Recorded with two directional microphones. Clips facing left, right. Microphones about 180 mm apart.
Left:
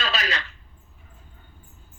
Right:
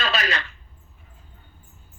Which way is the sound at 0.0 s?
55° right (ahead or behind).